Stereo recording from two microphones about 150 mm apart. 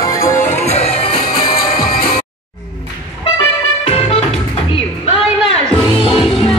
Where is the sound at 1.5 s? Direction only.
80° left.